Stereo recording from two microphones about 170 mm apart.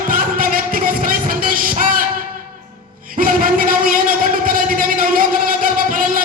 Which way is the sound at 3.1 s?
55° right (ahead or behind).